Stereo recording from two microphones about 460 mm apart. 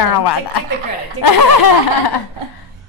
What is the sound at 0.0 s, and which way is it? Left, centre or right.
Speech, left.